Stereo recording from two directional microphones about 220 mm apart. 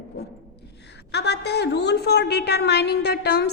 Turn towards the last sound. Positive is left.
turn(degrees=50)  # may be behind; listen again after turning